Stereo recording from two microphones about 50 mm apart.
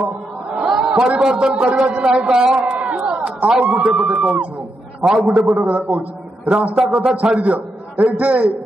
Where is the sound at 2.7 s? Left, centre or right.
Right.